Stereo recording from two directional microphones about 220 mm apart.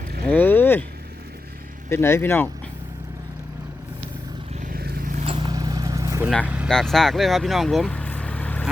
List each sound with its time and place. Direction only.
0.3 s vehicle: 10° left (ahead or behind)
1.9 s speech: 10° left (ahead or behind)
4.6 s vehicle: 45° right (ahead or behind)
5.2 s vehicle: 20° right (ahead or behind)
6.4 s speech: 5° right (ahead or behind)